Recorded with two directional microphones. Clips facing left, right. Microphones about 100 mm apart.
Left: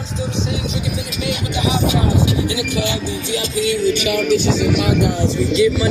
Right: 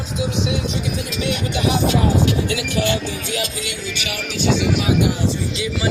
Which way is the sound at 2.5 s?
10° left (ahead or behind).